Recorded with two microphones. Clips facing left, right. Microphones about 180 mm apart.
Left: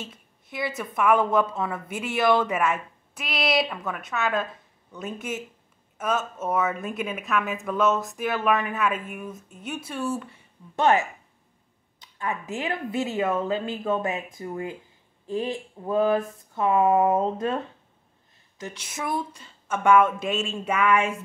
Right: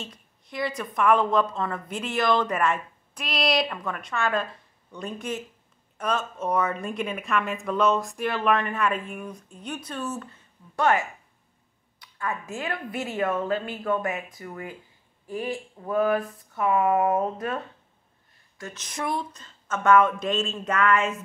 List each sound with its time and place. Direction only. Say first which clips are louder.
0.0 s a woman's voice: left 1 dB; 5° left (ahead or behind)
12.0 s a woman's voice: left 1 dB; 20° left (ahead or behind)
18.6 s a woman's voice: even; 10° left (ahead or behind)